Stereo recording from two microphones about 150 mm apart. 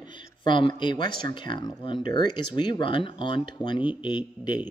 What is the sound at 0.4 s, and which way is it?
Speech, 30° left (ahead or behind).